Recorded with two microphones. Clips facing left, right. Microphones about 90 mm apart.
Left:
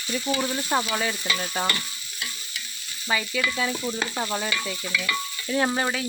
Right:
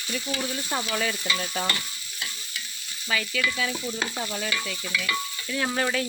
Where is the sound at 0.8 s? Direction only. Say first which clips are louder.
Left 2 dB; 15° left (ahead or behind).